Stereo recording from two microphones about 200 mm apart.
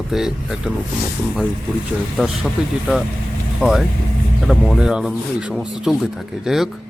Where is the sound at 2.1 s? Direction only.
Centre (ahead or behind).